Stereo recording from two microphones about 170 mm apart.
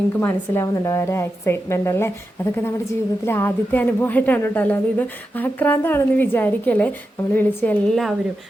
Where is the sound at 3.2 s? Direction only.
15° left (ahead or behind).